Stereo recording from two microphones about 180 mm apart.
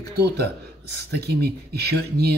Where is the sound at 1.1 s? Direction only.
65° right (ahead or behind).